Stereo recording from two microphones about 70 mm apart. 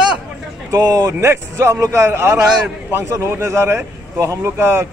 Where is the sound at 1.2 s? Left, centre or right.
Right.